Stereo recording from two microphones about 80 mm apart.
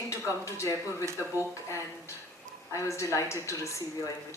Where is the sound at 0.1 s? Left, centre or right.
Left.